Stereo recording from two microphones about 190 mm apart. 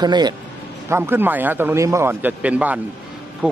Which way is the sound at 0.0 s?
20° right (ahead or behind).